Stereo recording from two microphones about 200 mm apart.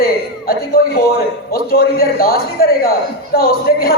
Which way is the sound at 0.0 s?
50° left (ahead or behind).